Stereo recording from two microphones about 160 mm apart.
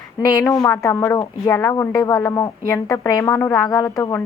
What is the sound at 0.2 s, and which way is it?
Speech, 20° left (ahead or behind).